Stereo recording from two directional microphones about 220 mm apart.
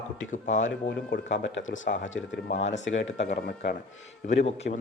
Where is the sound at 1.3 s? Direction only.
55° left (ahead or behind).